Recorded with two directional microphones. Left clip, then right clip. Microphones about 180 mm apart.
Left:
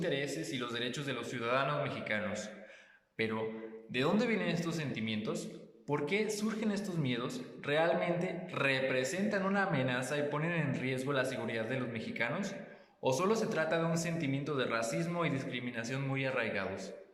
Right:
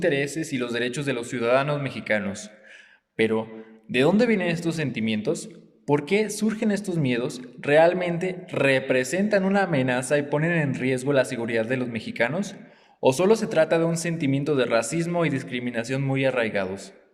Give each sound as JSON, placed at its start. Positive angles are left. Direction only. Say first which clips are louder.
{"t": 0.0, "sound": "speech", "louder": "right 11 dB", "side_deg": -45}